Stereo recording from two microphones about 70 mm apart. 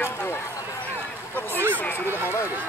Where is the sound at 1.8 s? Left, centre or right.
Left.